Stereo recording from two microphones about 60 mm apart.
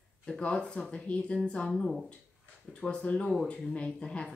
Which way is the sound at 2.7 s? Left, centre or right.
Centre.